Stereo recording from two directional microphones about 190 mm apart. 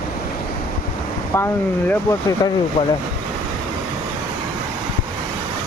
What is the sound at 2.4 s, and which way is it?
Speech, 20° left (ahead or behind).